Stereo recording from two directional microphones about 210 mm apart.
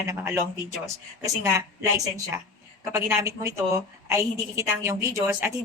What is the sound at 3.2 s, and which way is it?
A woman's voice, 15° right (ahead or behind).